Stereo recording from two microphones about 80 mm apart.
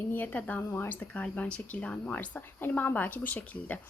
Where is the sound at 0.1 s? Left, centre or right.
Left.